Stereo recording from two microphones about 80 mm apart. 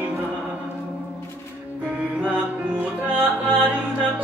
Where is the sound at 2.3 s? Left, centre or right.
Centre.